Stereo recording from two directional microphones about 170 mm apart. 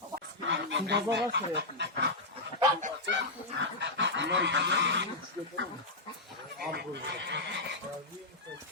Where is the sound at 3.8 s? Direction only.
90° right.